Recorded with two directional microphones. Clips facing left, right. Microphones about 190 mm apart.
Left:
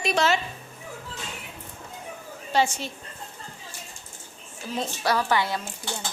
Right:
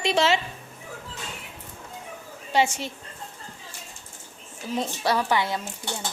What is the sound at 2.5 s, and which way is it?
Speech, 25° right (ahead or behind).